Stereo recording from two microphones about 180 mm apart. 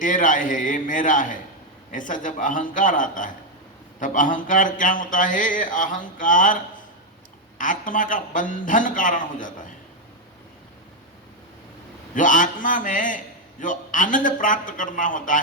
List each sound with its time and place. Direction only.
0.0 s a man's voice: 45° left (ahead or behind)
7.6 s a man's voice: 45° left (ahead or behind)
12.1 s a man's voice: 45° left (ahead or behind)